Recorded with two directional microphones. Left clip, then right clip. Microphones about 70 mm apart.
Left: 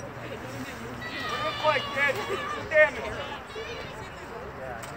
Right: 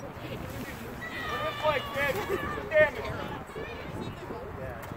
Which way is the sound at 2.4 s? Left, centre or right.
Centre.